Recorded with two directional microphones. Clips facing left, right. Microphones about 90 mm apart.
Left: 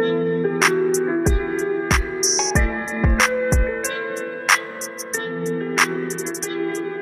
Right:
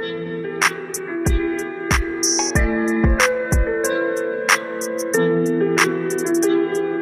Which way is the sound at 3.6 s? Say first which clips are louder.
Right 5 dB; 25° right (ahead or behind).